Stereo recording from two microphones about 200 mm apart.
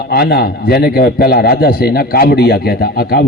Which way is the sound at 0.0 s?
50° left (ahead or behind).